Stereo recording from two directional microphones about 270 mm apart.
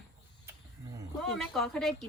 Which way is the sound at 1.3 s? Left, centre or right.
Centre.